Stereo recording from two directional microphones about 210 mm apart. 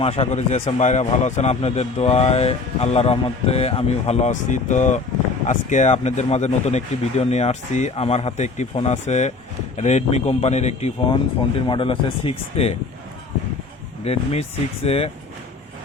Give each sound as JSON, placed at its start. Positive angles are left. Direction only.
{"t": 0.0, "sound": "a man's voice", "side_deg": 30}
{"t": 14.0, "sound": "speech", "side_deg": 30}